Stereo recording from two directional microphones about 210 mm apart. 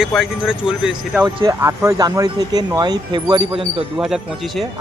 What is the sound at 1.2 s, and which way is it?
Speech, 15° right (ahead or behind).